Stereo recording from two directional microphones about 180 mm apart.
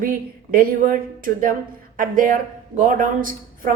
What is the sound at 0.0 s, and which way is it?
A woman's voice, 50° right (ahead or behind).